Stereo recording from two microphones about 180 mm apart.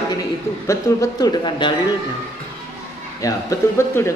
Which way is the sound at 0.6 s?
20° left (ahead or behind).